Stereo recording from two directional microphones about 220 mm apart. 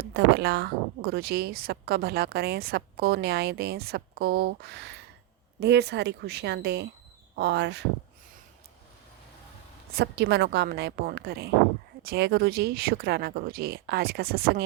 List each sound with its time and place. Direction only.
0.0 s speech: 50° right (ahead or behind)
9.9 s speech: 45° right (ahead or behind)